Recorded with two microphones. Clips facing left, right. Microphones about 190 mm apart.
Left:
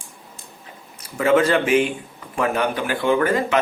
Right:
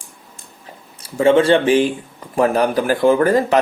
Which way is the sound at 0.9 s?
30° right (ahead or behind).